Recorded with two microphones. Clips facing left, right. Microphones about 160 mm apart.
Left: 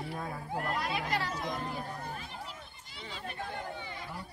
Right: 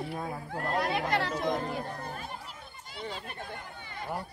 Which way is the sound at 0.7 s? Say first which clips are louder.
Right 8 dB; 60° right (ahead or behind).